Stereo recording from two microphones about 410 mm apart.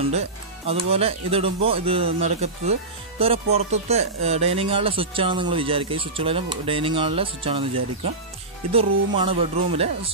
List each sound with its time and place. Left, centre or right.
0.7 s speech: centre